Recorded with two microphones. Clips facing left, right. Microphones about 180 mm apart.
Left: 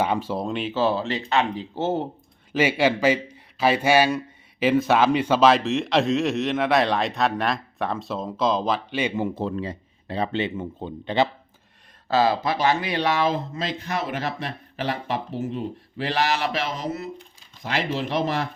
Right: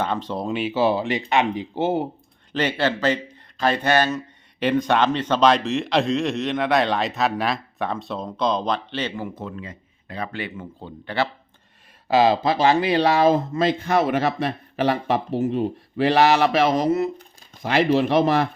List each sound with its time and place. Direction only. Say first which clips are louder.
0.0 s speech: left 1 dB; 10° left (ahead or behind); by 2.0 s 10° right (ahead or behind)
2.5 s a man's voice: left 2 dB; 10° left (ahead or behind)
9.1 s speech: left 5 dB; 25° left (ahead or behind)
12.0 s speech: right 3 dB; 15° right (ahead or behind); by 18.4 s 65° right (ahead or behind)